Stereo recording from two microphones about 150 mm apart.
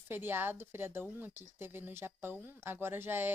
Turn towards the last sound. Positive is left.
turn(degrees=-15)  # may be behind; listen again after turning